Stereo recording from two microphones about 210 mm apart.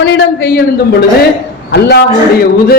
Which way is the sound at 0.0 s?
60° left (ahead or behind).